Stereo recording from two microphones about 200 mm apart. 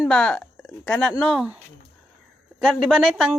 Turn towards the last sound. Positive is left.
turn(degrees=-5)  # may be behind; listen again after turning